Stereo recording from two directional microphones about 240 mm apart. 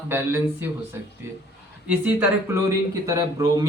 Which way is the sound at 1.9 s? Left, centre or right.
Centre.